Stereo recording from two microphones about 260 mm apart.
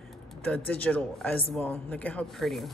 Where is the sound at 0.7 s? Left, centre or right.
Centre.